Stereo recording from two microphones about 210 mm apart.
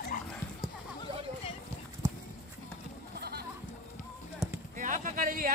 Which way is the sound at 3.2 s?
50° right (ahead or behind).